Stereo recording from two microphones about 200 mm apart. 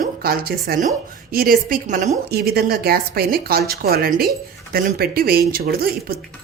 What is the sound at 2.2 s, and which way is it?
Speech, 50° right (ahead or behind).